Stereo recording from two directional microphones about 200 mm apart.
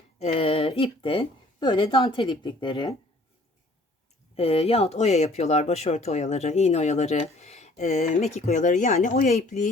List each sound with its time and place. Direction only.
0.2 s a woman's voice: 30° left (ahead or behind)
4.4 s speech: 30° left (ahead or behind)